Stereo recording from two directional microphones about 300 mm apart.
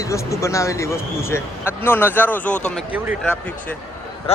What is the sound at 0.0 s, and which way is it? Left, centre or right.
A man's voice, centre.